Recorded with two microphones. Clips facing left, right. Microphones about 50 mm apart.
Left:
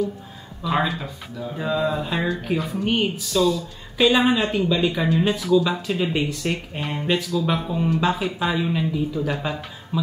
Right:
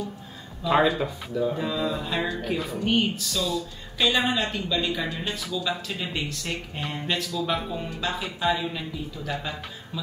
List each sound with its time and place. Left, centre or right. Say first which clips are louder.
0.7 s speech: right 2 dB; centre
1.6 s speech: left 4 dB; centre